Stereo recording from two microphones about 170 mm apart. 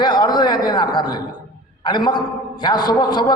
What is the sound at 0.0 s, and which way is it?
A man's voice, 25° left (ahead or behind).